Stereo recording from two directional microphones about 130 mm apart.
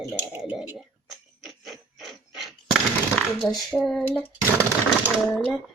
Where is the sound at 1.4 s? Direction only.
Centre (ahead or behind).